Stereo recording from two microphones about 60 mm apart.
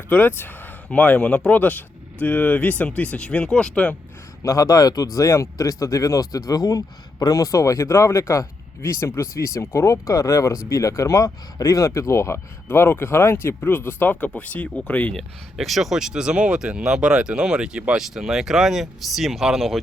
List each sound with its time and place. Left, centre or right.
0.1 s speech: left; by 1.5 s centre
1.5 s speech: left
4.4 s speech: left
6.5 s speech: left
12.6 s speech: left
15.5 s speech: centre